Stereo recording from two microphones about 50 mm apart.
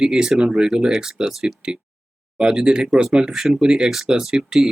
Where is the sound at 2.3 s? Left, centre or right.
Centre.